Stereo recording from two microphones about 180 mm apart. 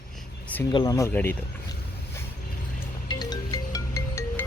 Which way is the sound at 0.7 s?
25° left (ahead or behind).